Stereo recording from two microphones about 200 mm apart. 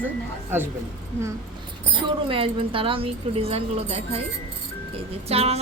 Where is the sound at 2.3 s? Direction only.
25° right (ahead or behind).